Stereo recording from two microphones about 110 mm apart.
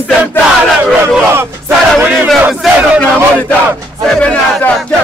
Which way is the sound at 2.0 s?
10° right (ahead or behind).